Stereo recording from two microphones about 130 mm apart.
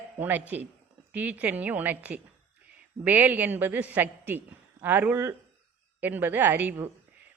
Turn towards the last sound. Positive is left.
turn(degrees=-15)  # may be behind; listen again after turning